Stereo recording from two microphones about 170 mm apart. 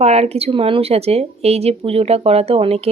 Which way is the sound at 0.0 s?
40° right (ahead or behind).